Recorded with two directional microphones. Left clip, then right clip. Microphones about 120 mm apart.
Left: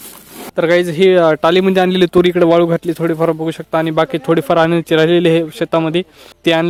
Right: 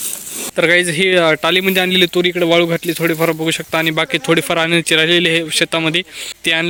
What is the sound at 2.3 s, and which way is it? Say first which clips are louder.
Speech: left 1 dB; 35° left (ahead or behind).